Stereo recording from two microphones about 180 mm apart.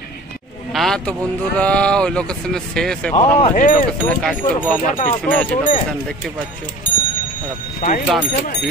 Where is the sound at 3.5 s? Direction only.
50° left (ahead or behind).